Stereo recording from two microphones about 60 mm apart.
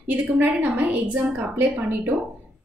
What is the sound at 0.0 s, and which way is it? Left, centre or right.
A woman's voice, right.